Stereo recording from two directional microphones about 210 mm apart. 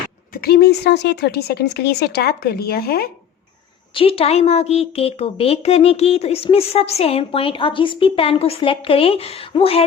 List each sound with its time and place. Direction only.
0.4 s speech: 50° left (ahead or behind)
3.9 s a woman's voice: 25° left (ahead or behind)